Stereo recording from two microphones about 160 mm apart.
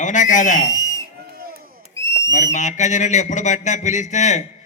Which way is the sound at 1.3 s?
70° right (ahead or behind).